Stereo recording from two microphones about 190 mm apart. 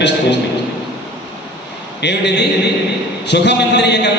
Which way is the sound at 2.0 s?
65° left (ahead or behind).